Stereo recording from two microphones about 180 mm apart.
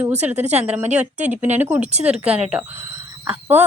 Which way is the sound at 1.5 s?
10° right (ahead or behind).